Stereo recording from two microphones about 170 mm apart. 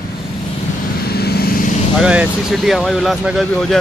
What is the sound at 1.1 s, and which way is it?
Vehicle, 70° left (ahead or behind).